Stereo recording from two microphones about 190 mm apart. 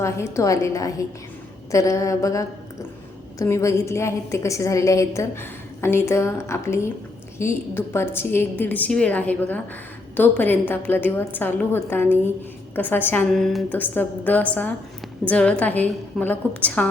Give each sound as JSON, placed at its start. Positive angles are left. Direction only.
{"t": 0.0, "sound": "a woman's voice", "side_deg": 15}